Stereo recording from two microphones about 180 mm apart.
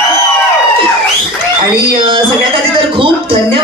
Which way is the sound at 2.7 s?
30° right (ahead or behind).